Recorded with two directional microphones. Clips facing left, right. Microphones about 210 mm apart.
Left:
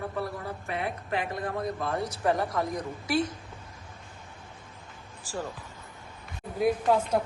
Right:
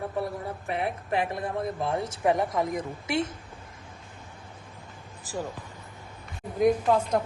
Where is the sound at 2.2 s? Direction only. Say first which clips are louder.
Right 3 dB; 20° right (ahead or behind).